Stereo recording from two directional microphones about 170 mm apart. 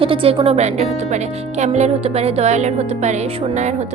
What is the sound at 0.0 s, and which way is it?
Speech, 35° right (ahead or behind).